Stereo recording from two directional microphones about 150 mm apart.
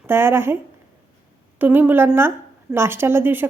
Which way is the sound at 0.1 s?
15° right (ahead or behind).